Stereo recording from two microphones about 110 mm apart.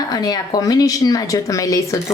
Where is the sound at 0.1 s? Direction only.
35° left (ahead or behind).